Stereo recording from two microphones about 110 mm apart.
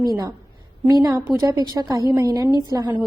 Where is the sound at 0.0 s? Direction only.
35° right (ahead or behind).